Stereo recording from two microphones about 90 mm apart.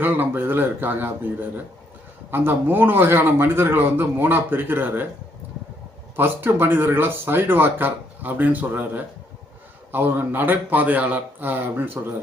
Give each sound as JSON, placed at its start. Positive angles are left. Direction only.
{"t": 0.0, "sound": "speech", "side_deg": -20}
{"t": 6.1, "sound": "speech", "side_deg": -25}